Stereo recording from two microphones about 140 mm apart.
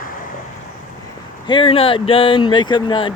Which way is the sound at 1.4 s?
35° left (ahead or behind).